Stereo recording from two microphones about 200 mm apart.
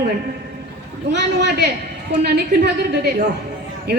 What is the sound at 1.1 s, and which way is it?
A woman's voice, 55° right (ahead or behind).